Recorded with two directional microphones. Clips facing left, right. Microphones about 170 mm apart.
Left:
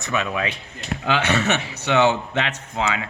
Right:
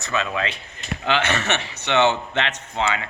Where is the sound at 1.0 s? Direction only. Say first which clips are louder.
Left 1 dB; 10° left (ahead or behind).